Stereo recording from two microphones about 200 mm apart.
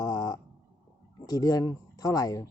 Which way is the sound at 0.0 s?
20° left (ahead or behind).